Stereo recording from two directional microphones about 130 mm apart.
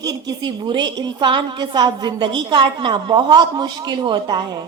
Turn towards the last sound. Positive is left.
turn(degrees=-30)  # may be behind; listen again after turning